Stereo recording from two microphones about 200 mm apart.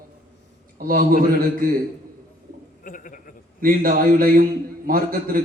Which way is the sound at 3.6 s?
45° right (ahead or behind).